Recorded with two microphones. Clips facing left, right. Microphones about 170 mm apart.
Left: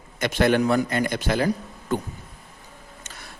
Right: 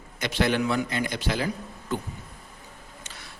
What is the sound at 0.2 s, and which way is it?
A man's voice, 50° left (ahead or behind).